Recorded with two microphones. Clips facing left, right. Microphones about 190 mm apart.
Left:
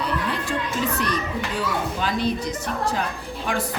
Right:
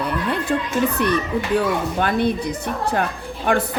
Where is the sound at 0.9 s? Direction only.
60° right (ahead or behind).